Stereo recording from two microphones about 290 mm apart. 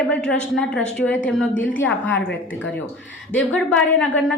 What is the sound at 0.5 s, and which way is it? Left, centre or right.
Speech, centre.